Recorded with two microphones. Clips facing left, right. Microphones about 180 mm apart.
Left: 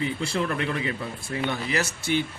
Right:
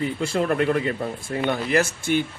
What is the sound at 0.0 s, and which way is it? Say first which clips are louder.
Speech: right 3 dB; 45° right (ahead or behind).